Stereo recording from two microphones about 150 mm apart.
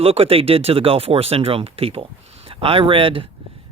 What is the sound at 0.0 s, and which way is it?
Speech, 40° right (ahead or behind).